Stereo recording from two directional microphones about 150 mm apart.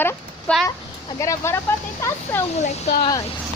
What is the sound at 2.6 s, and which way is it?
Speech, 50° left (ahead or behind).